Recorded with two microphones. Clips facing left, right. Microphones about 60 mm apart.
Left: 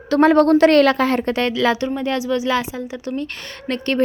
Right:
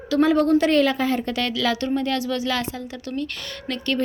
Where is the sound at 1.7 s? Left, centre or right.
Centre.